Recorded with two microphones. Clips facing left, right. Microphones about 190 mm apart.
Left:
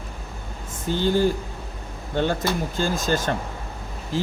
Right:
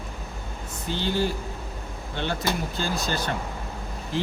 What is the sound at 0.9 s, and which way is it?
Speech, 45° left (ahead or behind).